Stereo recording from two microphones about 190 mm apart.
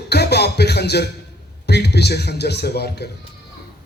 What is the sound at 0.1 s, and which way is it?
Music, 60° left (ahead or behind).